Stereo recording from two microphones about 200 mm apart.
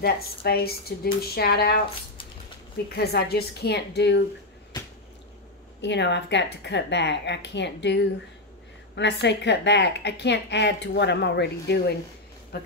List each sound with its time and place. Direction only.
0.0 s speech: 50° left (ahead or behind)
2.9 s speech: 50° left (ahead or behind)
5.8 s a woman's voice: 60° left (ahead or behind)